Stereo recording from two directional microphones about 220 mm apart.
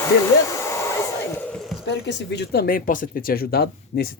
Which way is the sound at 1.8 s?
50° left (ahead or behind).